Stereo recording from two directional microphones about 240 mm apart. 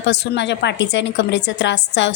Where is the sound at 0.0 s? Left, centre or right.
Left.